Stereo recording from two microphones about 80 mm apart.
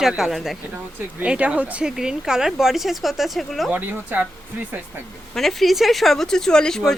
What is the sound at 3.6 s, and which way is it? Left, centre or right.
Speech, right.